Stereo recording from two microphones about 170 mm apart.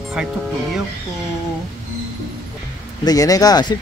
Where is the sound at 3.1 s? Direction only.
20° left (ahead or behind).